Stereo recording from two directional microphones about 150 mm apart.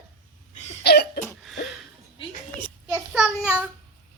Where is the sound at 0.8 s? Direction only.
90° left.